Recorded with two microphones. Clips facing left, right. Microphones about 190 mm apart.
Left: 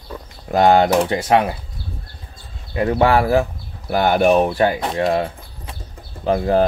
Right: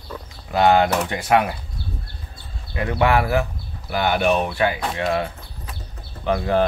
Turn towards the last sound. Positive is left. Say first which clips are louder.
# left 3 dB
turn(degrees=30)  # may be behind; listen again after turning